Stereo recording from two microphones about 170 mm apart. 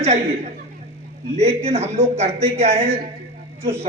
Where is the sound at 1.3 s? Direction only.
40° right (ahead or behind).